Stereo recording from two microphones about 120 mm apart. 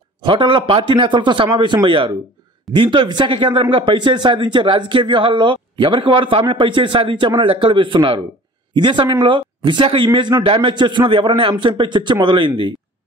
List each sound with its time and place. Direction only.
0.2 s a man's voice: 45° right (ahead or behind)